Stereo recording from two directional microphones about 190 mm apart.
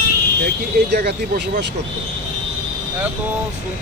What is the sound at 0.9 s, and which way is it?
Speech, 60° right (ahead or behind).